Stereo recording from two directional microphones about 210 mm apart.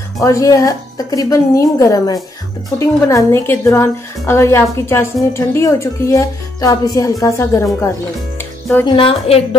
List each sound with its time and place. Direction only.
0.2 s a woman's voice: 15° left (ahead or behind)
8.4 s music: 10° left (ahead or behind)
8.8 s speech: 25° left (ahead or behind)